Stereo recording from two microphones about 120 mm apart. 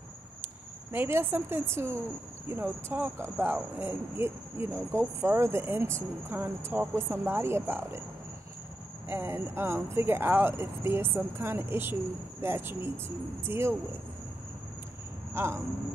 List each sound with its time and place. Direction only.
0.9 s speech: 20° right (ahead or behind)
9.1 s speech: 20° right (ahead or behind)
15.3 s speech: 20° right (ahead or behind)